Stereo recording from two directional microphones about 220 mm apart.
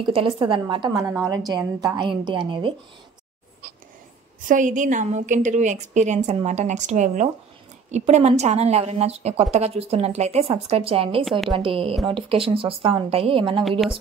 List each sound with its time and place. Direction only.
0.0 s a woman's voice: 25° right (ahead or behind)
4.5 s a woman's voice: 35° right (ahead or behind)
13.7 s a woman's voice: centre (ahead or behind)